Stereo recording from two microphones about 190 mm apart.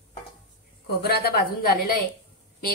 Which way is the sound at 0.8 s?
55° left (ahead or behind).